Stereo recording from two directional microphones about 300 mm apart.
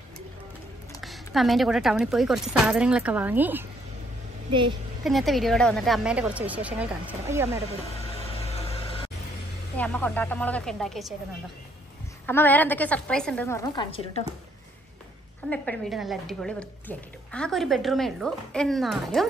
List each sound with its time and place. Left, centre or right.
1.0 s speech: centre
4.5 s a woman's voice: centre
5.0 s speech: centre
8.3 s a sound: centre
9.8 s speech: centre
12.3 s speech: centre
15.5 s speech: centre